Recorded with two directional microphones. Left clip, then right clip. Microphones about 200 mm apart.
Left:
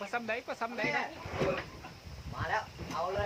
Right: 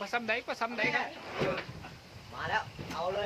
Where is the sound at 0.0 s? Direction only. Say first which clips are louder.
Right 3 dB; 35° right (ahead or behind).